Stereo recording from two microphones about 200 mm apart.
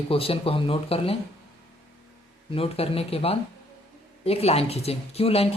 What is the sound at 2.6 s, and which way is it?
Speech, 30° left (ahead or behind).